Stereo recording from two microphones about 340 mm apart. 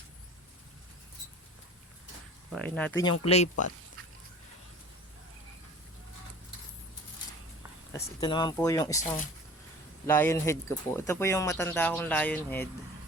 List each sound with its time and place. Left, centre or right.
2.5 s speech: centre
3.2 s speech: centre
7.9 s speech: centre
9.0 s speech: left
10.1 s speech: centre